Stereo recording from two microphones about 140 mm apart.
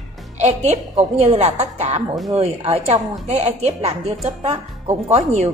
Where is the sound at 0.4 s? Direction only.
50° right (ahead or behind).